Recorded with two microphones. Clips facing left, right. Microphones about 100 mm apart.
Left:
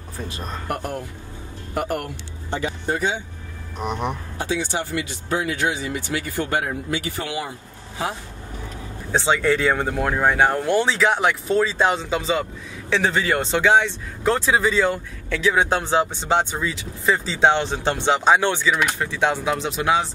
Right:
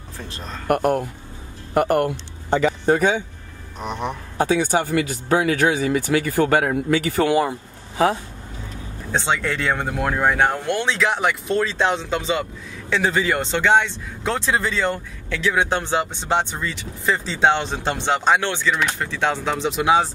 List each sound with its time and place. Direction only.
0.3 s speech: 10° left (ahead or behind)
0.7 s speech: 60° right (ahead or behind)
3.8 s speech: centre (ahead or behind)
4.4 s speech: 45° right (ahead or behind)
5.7 s speech: 45° right (ahead or behind)
9.1 s speech: 5° left (ahead or behind)